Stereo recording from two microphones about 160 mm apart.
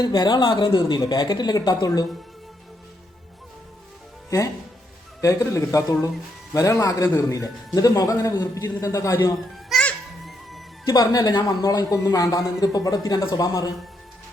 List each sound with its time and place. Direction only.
0.0 s a man's voice: 25° left (ahead or behind)
5.2 s a man's voice: 20° left (ahead or behind)
9.6 s music: centre (ahead or behind)
10.8 s a man's voice: 25° left (ahead or behind)